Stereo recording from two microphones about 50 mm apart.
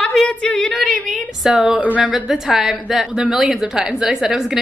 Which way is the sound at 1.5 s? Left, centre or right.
Right.